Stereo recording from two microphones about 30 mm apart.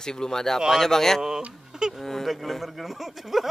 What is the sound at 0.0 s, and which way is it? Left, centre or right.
A man's voice, left.